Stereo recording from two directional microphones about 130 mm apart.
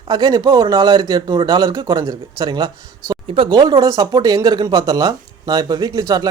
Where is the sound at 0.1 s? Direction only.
35° right (ahead or behind).